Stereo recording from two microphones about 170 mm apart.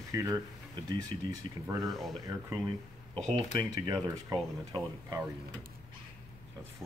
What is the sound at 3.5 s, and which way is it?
Speech, 20° right (ahead or behind).